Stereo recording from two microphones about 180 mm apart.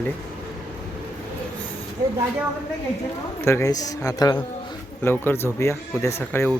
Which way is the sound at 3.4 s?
15° left (ahead or behind).